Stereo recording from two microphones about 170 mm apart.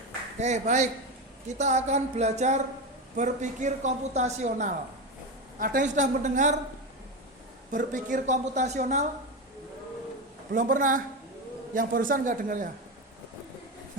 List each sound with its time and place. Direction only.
0.3 s a man's voice: 40° right (ahead or behind)
7.7 s a man's voice: 50° right (ahead or behind)
10.5 s a man's voice: 50° right (ahead or behind)